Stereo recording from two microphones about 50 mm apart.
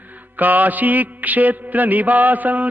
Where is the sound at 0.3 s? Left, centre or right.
Right.